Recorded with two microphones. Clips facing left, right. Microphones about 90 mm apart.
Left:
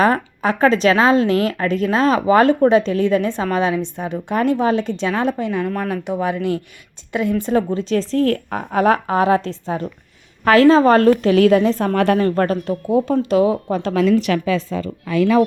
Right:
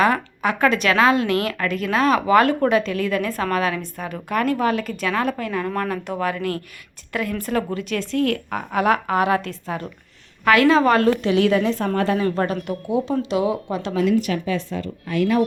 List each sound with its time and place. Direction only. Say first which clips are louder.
0.0 s a woman's voice: left 3 dB; 35° left (ahead or behind)
13.9 s a woman's voice: left 3 dB; 90° left